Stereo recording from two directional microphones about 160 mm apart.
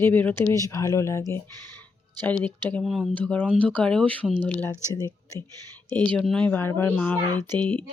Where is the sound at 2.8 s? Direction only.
Centre (ahead or behind).